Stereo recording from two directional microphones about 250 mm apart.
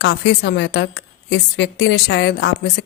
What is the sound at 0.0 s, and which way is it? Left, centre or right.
Speech, left.